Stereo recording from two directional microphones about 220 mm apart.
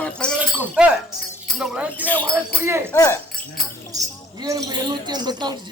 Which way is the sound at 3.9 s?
15° right (ahead or behind).